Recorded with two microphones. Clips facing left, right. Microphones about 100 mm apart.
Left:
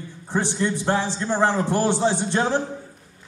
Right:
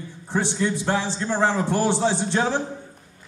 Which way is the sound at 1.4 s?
15° right (ahead or behind).